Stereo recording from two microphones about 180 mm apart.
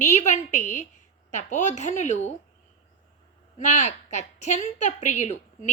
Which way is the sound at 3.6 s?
40° left (ahead or behind).